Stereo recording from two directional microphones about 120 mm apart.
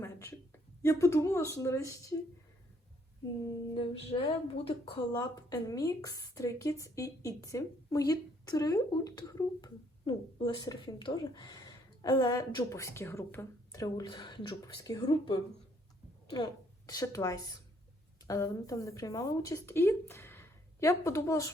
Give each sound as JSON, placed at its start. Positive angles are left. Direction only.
{"t": 0.0, "sound": "speech", "side_deg": 20}
{"t": 3.8, "sound": "a woman's voice", "side_deg": 50}
{"t": 4.9, "sound": "a woman's voice", "side_deg": 35}
{"t": 12.7, "sound": "a woman's voice", "side_deg": 25}